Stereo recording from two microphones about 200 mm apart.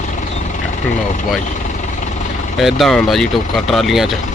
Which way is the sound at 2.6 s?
Centre (ahead or behind).